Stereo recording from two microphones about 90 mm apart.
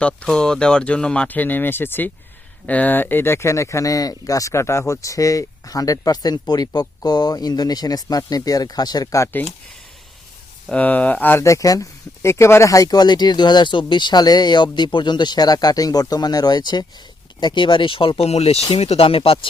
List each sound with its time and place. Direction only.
0.3 s speech: 5° left (ahead or behind); by 9.2 s 45° left (ahead or behind)
9.2 s speech: 20° left (ahead or behind)
10.7 s speech: 15° left (ahead or behind)
11.4 s speech: 35° left (ahead or behind); by 18.3 s 75° left (ahead or behind)
18.7 s speech: 90° left